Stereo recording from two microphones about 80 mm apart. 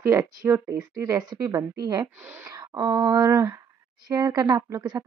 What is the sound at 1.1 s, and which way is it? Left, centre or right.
A woman's voice, right.